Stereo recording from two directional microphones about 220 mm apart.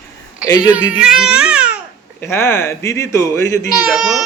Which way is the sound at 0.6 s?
5° right (ahead or behind).